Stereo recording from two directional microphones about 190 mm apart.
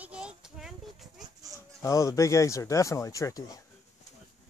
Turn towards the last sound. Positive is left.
turn(degrees=20)  # may be behind; listen again after turning